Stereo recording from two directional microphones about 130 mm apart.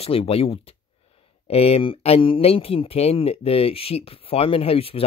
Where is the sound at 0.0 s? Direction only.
50° left (ahead or behind).